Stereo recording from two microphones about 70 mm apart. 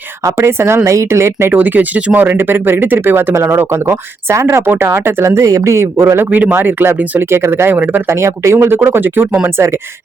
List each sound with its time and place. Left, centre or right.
0.3 s a woman's voice: right
1.5 s speech: right
3.6 s speech: right